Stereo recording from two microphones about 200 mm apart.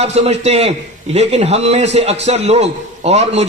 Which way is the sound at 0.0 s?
30° right (ahead or behind).